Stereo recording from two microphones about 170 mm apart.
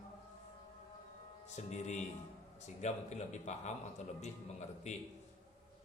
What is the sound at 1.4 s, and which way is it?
A man's voice, 40° left (ahead or behind).